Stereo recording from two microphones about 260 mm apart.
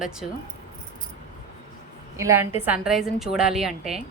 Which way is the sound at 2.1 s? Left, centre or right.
Centre.